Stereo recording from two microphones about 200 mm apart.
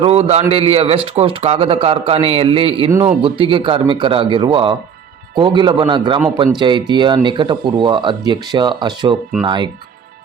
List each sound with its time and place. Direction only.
0.0 s a man's voice: 30° right (ahead or behind)